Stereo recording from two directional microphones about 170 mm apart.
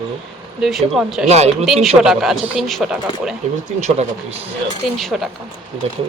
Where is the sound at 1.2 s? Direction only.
40° right (ahead or behind).